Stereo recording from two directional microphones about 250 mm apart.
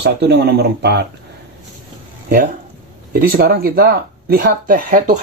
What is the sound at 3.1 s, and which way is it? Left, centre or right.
Speech, right.